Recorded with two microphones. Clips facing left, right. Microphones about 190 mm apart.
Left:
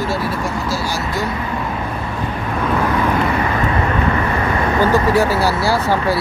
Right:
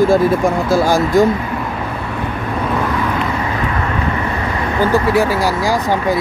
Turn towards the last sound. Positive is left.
turn(degrees=-15)  # may be behind; listen again after turning